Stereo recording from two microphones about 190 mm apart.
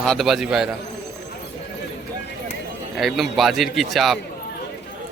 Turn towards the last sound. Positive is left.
turn(degrees=0)  # may be behind; listen again after turning